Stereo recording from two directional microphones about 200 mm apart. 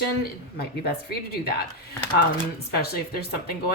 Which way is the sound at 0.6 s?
50° left (ahead or behind).